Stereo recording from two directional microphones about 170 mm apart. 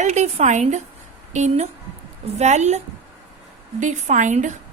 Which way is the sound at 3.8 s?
45° right (ahead or behind).